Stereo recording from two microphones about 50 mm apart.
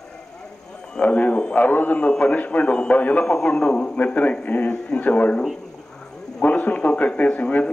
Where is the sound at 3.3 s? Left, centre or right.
Centre.